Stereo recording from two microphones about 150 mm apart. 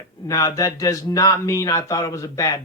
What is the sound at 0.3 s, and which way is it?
Speech, 20° left (ahead or behind).